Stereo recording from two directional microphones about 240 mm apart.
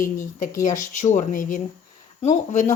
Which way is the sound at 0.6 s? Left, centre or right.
Left.